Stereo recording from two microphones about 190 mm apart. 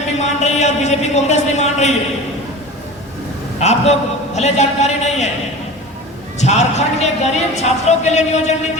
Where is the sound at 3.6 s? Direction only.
35° left (ahead or behind).